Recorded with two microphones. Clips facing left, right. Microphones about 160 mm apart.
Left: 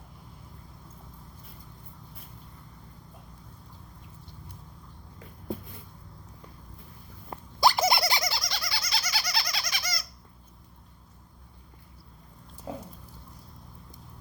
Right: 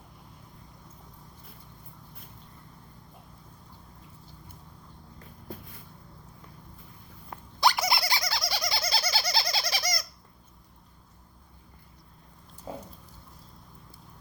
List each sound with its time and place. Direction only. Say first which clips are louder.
7.3 s a sound: left 2 dB; 35° left (ahead or behind)
8.4 s bird: right 4 dB; 10° right (ahead or behind)
8.6 s bird: right 4 dB; 25° right (ahead or behind)